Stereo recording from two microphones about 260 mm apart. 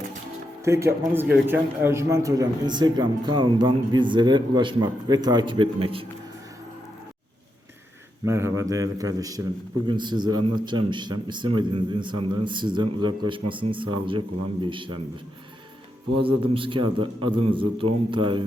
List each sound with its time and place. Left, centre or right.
0.6 s a man's voice: centre
8.2 s a man's voice: centre
16.1 s a man's voice: centre